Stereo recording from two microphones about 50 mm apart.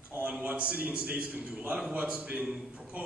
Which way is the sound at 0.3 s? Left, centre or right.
Right.